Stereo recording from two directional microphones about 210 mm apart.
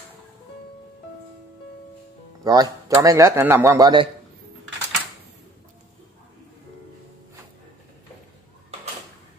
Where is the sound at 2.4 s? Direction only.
20° right (ahead or behind).